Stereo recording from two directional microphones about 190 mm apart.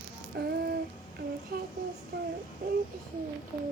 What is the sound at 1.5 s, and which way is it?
Speech, 50° right (ahead or behind).